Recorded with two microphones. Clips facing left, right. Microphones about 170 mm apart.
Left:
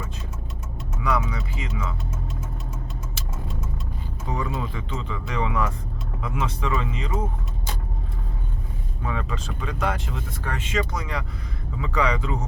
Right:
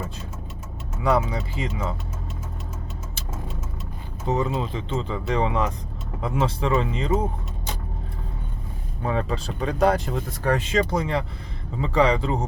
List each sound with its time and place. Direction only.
1.0 s speech: 30° right (ahead or behind)
4.3 s speech: 25° right (ahead or behind)
9.0 s speech: 35° right (ahead or behind)